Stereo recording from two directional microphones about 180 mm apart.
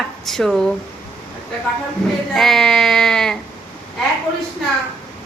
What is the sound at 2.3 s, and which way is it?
Speech, centre (ahead or behind).